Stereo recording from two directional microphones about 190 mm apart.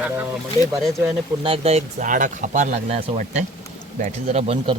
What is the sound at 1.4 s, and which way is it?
Speech, 30° right (ahead or behind).